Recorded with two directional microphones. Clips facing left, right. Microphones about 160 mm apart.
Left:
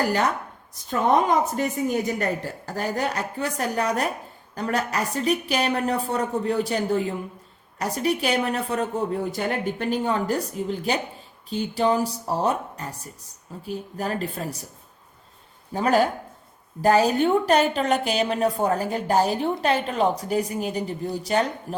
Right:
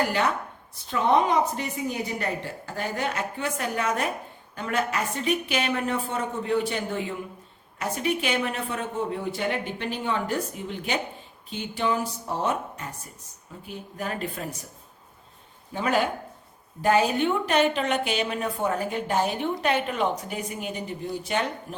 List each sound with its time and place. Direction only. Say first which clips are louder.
0.7 s a woman's voice: left 1 dB; 45° left (ahead or behind)
15.7 s a woman's voice: left 4 dB; 40° left (ahead or behind)